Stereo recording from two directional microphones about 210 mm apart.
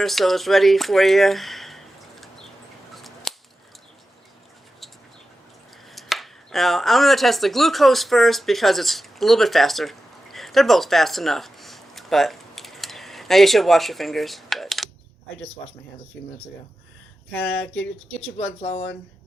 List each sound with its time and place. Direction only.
0.0 s speech: centre (ahead or behind)
2.9 s a sound: centre (ahead or behind)
5.9 s speech: centre (ahead or behind)
17.3 s speech: 5° left (ahead or behind)
18.6 s speech: 25° left (ahead or behind)